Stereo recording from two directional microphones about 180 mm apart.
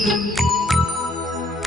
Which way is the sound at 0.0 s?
Centre (ahead or behind).